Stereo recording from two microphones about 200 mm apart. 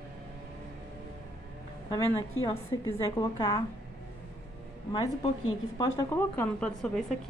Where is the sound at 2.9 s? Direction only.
20° left (ahead or behind).